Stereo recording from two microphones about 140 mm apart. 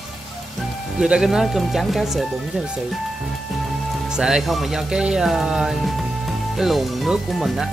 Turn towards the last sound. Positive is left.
turn(degrees=-5)  # may be behind; listen again after turning